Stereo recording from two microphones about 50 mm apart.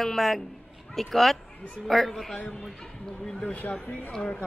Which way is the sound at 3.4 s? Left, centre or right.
Left.